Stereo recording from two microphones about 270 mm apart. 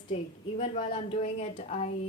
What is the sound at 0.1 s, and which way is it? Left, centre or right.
A woman's voice, left.